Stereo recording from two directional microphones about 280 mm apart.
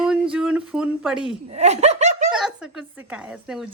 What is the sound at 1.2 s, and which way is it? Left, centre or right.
Speech, right.